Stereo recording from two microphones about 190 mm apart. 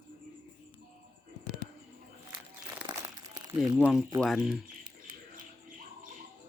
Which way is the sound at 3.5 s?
5° right (ahead or behind).